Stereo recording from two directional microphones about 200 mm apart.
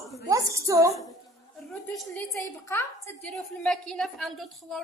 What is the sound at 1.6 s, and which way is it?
Speech, centre (ahead or behind).